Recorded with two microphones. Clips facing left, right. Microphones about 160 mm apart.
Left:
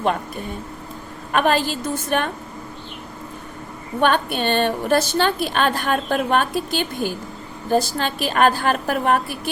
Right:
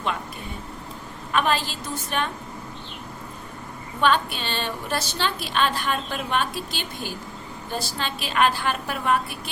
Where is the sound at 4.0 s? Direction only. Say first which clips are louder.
Left 3 dB; 55° left (ahead or behind).